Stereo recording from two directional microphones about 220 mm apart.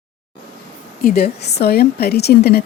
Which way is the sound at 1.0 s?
45° left (ahead or behind).